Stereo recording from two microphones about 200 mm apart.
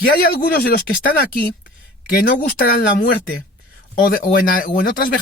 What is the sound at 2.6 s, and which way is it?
Speech, 45° left (ahead or behind).